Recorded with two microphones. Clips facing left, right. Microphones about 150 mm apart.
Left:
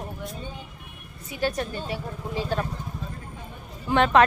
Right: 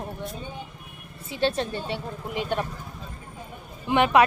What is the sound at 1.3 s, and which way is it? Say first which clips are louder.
Speech: right 2 dB; 25° right (ahead or behind).